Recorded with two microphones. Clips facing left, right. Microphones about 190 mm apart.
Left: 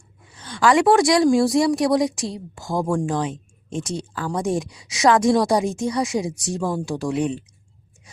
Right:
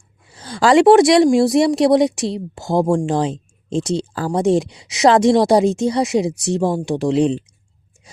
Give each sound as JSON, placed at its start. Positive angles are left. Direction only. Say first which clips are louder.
{"t": 0.3, "sound": "speech", "louder": "right 4 dB", "side_deg": -30}